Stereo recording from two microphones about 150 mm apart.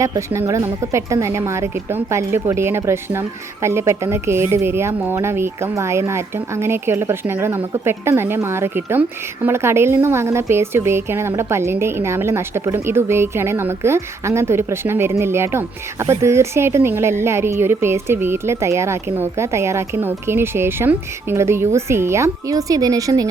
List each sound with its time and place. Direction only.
0.0 s a woman's voice: 20° right (ahead or behind)